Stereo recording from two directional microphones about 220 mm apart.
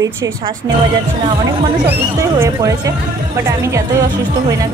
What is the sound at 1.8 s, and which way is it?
A woman's voice, 10° right (ahead or behind).